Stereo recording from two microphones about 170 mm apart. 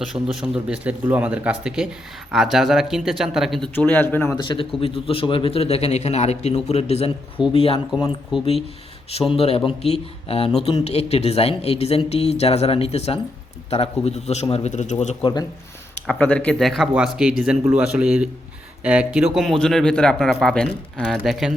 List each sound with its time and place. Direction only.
0.0 s a man's voice: centre (ahead or behind)
3.8 s speech: 10° left (ahead or behind)
4.4 s a man's voice: 30° left (ahead or behind)
9.3 s a man's voice: 35° left (ahead or behind)
15.2 s speech: 25° left (ahead or behind)
16.0 s a man's voice: 5° left (ahead or behind)